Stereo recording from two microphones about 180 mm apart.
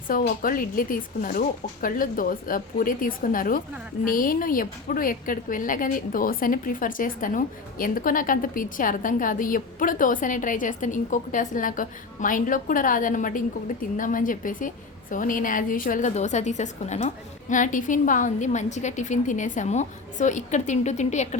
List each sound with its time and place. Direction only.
0.1 s a woman's voice: 50° left (ahead or behind)